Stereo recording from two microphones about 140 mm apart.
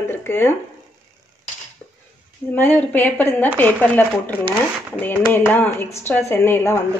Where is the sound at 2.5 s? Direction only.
15° left (ahead or behind).